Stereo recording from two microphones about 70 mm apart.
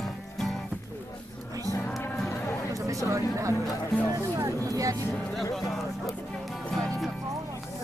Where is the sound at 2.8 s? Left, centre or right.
Right.